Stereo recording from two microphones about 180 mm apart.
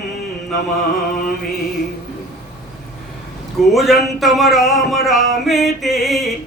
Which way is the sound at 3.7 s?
Centre (ahead or behind).